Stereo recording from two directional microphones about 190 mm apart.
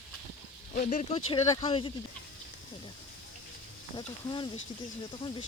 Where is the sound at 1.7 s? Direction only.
30° left (ahead or behind).